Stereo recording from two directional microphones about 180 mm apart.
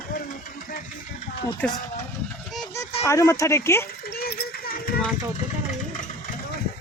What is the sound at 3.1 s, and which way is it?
Speech, 15° left (ahead or behind).